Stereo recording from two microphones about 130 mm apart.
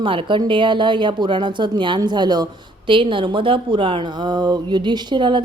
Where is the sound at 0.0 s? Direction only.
40° right (ahead or behind).